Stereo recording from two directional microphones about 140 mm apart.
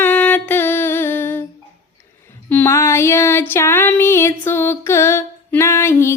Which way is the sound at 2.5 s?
15° left (ahead or behind).